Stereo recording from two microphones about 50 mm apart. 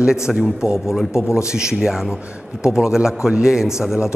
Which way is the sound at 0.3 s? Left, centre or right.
Centre.